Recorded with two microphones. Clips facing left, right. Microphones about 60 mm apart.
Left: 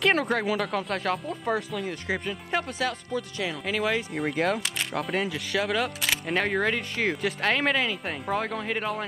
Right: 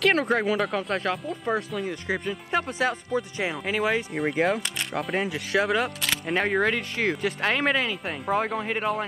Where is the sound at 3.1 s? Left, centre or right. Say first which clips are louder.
Right 3 dB; right.